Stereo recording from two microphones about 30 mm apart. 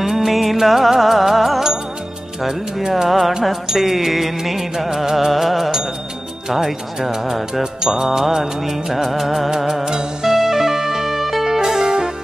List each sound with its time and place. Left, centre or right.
0.0 s music: centre
3.1 s music: centre
6.5 s music: centre
9.8 s music: right
10.3 s music: centre